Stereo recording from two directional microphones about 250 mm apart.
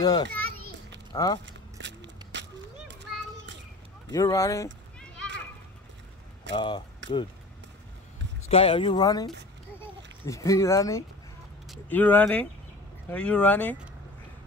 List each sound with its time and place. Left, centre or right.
0.0 s speech: centre
1.4 s a sound: right
2.9 s children playing: right
4.1 s a sound: centre
6.5 s speech: centre
8.5 s speech: left; by 13.7 s centre